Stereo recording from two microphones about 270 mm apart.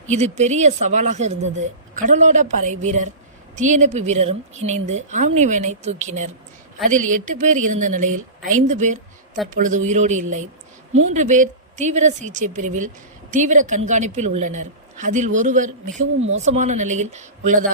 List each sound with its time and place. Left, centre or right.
0.1 s a woman's voice: right